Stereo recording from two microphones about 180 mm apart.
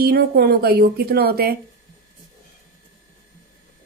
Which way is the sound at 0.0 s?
60° right (ahead or behind).